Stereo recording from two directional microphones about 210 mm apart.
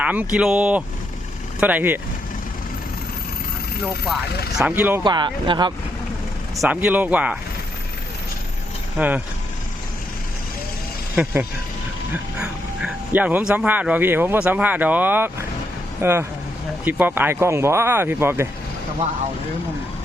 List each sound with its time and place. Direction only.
0.0 s speech: 5° right (ahead or behind)
4.5 s speech: 10° right (ahead or behind)
5.0 s speech: 20° right (ahead or behind)
6.6 s speech: 5° right (ahead or behind)
9.0 s speech: 5° right (ahead or behind)
11.1 s speech: 5° right (ahead or behind)